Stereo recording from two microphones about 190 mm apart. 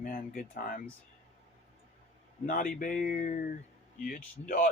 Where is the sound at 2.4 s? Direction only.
45° left (ahead or behind).